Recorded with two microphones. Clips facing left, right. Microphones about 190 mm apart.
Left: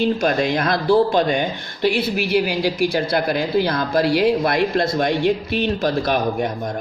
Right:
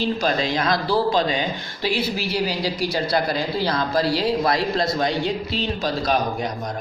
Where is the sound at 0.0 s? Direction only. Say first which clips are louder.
Left 4 dB; 55° left (ahead or behind).